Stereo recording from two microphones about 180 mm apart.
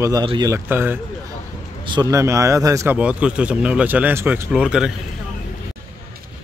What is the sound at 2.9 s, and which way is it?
Speech, 5° right (ahead or behind).